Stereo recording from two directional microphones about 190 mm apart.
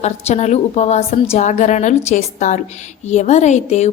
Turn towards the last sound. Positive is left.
turn(degrees=35)  # may be behind; listen again after turning